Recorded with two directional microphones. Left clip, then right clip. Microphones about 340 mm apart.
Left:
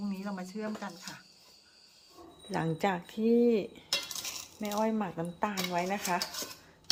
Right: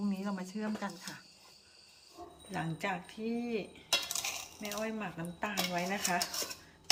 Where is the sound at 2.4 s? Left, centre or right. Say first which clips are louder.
Left 6 dB; centre.